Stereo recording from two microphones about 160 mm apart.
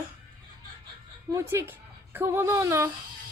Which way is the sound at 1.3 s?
15° right (ahead or behind).